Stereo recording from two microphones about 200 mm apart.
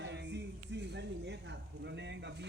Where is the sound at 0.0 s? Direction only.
60° right (ahead or behind).